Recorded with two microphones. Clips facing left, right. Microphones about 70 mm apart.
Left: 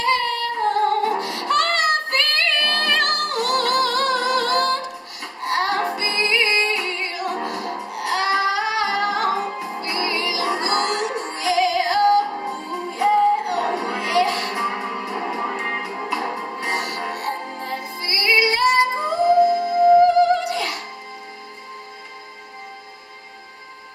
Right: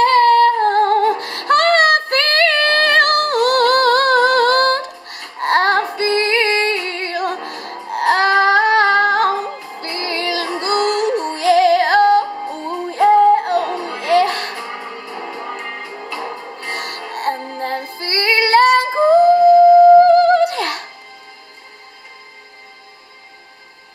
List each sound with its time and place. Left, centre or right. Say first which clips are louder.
0.0 s female singing: right 11 dB; right
5.4 s music: right 6 dB; right
14.5 s music: left 4 dB; centre
17.1 s music: right 4 dB; right